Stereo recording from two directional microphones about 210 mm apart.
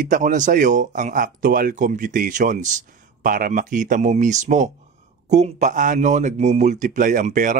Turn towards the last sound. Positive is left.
turn(degrees=-40)  # may be behind; listen again after turning